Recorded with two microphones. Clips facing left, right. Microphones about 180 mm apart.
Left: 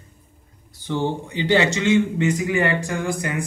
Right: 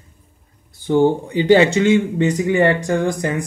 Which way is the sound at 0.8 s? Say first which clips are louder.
Right 9 dB; 50° right (ahead or behind).